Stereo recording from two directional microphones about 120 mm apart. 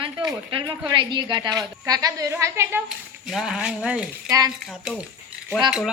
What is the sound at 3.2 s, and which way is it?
Speech, centre (ahead or behind).